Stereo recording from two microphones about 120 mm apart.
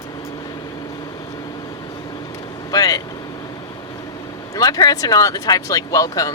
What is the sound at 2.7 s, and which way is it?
Speech, 30° left (ahead or behind).